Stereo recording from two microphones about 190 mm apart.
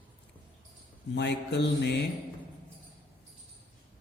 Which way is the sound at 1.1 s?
65° left (ahead or behind).